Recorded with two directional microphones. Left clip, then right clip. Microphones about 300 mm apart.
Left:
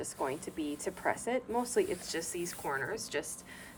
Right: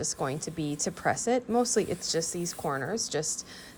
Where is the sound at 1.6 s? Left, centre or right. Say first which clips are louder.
Right 4 dB; centre.